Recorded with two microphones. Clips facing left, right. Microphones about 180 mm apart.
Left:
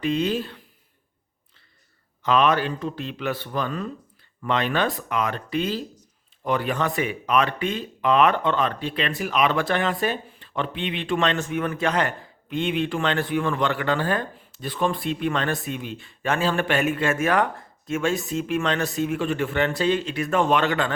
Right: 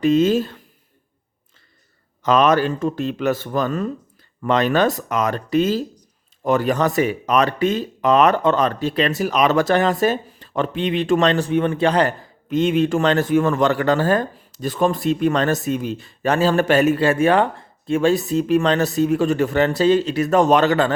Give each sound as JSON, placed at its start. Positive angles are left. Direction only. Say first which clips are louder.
{"t": 0.0, "sound": "speech", "louder": "right 8 dB", "side_deg": -40}
{"t": 2.2, "sound": "speech", "louder": "right 5 dB", "side_deg": -40}